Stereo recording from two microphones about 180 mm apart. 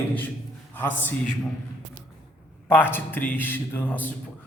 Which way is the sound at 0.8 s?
10° left (ahead or behind).